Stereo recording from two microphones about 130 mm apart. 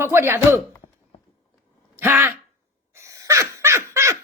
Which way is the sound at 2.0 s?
15° right (ahead or behind).